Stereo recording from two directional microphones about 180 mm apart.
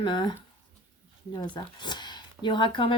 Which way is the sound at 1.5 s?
25° left (ahead or behind).